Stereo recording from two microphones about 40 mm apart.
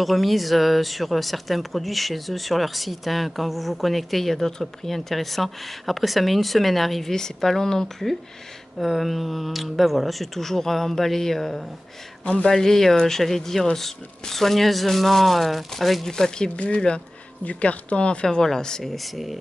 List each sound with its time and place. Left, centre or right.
0.0 s speech: centre
16.1 s speech: centre
16.5 s speech: left
18.2 s speech: centre
18.9 s speech: centre